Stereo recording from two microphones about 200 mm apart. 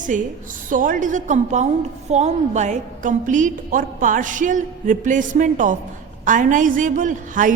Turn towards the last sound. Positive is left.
turn(degrees=-40)  # may be behind; listen again after turning